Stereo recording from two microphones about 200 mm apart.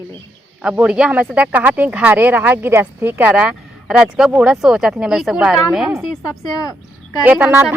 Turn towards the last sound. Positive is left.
turn(degrees=-10)  # may be behind; listen again after turning